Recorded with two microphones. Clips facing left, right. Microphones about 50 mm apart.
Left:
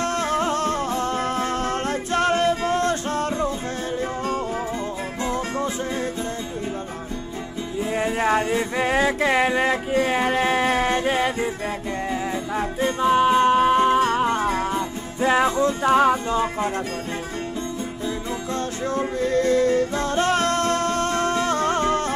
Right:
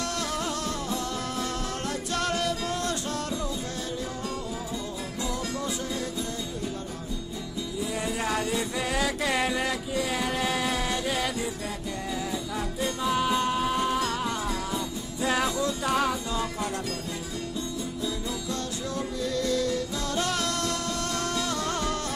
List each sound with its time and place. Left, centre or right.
0.0 s music: left
5.2 s music: left
7.9 s music: left
18.0 s music: left